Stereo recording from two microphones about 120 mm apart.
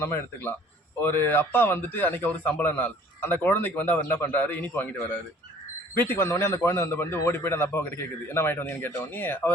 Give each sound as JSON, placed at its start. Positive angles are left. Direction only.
{"t": 0.0, "sound": "a man's voice", "side_deg": 20}